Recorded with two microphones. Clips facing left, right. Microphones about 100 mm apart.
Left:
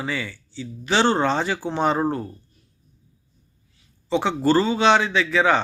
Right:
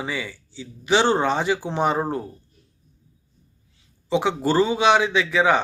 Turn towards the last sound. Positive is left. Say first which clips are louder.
# even
turn(degrees=-15)  # may be behind; listen again after turning